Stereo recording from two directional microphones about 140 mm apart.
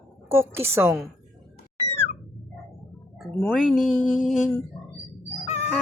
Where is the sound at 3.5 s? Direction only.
Centre (ahead or behind).